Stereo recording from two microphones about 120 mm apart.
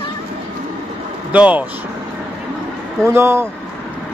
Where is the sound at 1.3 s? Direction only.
10° right (ahead or behind).